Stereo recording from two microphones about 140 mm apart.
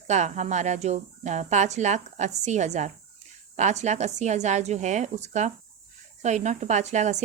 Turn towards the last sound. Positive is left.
turn(degrees=-55)  # may be behind; listen again after turning